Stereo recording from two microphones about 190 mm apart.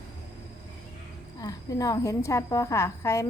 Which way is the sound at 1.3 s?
20° left (ahead or behind).